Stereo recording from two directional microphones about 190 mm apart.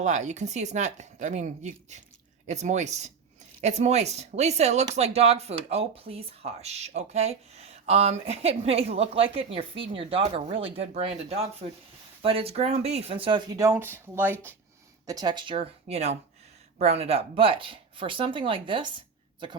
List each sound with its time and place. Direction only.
0.0 s speech: 40° right (ahead or behind)